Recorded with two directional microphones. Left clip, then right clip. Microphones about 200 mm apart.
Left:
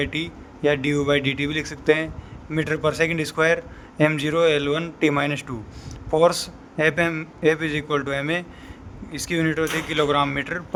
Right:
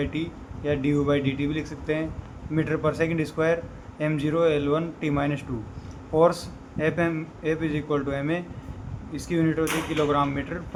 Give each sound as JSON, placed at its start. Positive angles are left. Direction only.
{"t": 0.0, "sound": "a man's voice", "side_deg": 60}